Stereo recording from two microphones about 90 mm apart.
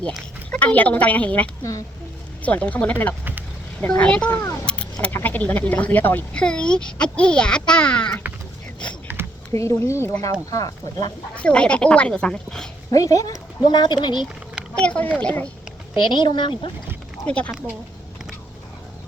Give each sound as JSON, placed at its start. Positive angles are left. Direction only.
{"t": 0.5, "sound": "speech", "side_deg": 20}
{"t": 1.7, "sound": "speech", "side_deg": 40}
{"t": 2.4, "sound": "speech", "side_deg": 15}
{"t": 4.6, "sound": "keys jangling", "side_deg": 10}
{"t": 5.1, "sound": "speech", "side_deg": 20}
{"t": 6.3, "sound": "speech", "side_deg": 10}
{"t": 9.5, "sound": "speech", "side_deg": 35}
{"t": 10.5, "sound": "speech", "side_deg": 45}
{"t": 11.3, "sound": "speech", "side_deg": 15}
{"t": 12.9, "sound": "speech", "side_deg": 40}
{"t": 13.7, "sound": "speech", "side_deg": 55}
{"t": 14.8, "sound": "speech", "side_deg": 15}
{"t": 16.0, "sound": "speech", "side_deg": 60}
{"t": 17.2, "sound": "speech", "side_deg": 15}